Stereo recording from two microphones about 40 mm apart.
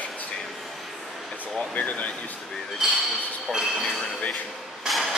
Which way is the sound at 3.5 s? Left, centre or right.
Centre.